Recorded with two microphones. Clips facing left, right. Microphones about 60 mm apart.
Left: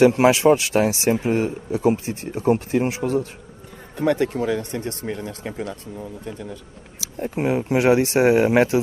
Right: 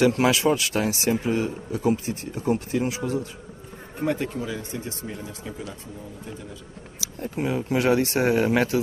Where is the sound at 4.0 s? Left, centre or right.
Left.